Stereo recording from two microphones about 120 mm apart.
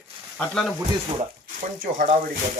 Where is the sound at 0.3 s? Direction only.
5° left (ahead or behind).